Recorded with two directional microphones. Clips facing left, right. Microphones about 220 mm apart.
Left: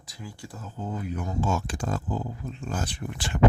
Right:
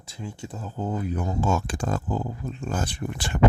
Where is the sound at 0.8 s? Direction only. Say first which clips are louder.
Right 4 dB; 40° right (ahead or behind).